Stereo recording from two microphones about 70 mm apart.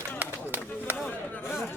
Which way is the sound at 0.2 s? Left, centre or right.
Right.